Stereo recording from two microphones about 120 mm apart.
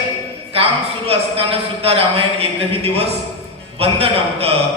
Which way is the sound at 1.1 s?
55° right (ahead or behind).